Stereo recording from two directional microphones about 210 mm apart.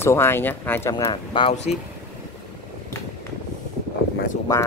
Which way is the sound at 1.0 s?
25° left (ahead or behind).